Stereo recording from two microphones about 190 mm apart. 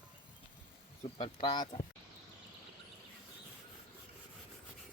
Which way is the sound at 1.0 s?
25° left (ahead or behind).